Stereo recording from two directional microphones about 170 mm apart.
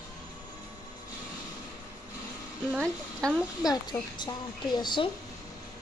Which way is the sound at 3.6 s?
25° left (ahead or behind).